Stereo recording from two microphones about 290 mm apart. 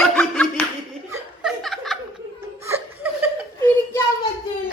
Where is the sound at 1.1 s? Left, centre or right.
Centre.